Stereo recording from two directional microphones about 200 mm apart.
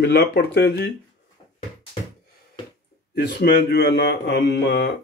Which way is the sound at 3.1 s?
55° left (ahead or behind).